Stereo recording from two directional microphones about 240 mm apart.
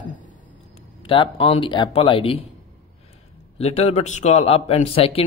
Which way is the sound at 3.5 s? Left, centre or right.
Left.